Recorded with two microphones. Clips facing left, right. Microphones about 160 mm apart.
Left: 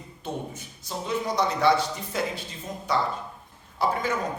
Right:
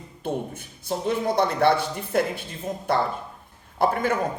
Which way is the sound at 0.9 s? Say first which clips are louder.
Right 5 dB; 60° right (ahead or behind).